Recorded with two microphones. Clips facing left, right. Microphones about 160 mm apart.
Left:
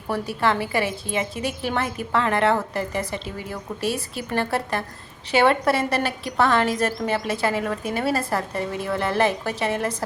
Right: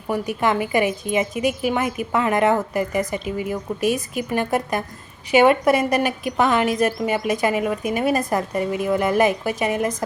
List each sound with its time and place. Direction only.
0.1 s a woman's voice: 15° right (ahead or behind)